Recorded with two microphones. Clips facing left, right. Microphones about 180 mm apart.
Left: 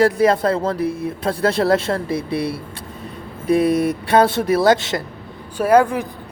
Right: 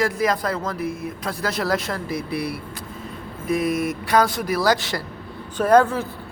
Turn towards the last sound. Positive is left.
turn(degrees=10)  # may be behind; listen again after turning